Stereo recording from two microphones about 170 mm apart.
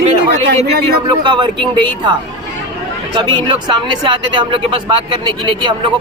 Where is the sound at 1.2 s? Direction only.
30° right (ahead or behind).